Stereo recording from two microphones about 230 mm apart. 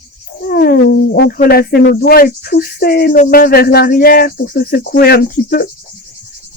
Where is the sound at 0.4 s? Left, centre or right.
Left.